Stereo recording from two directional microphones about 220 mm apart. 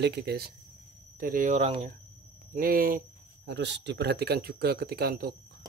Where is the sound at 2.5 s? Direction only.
40° right (ahead or behind).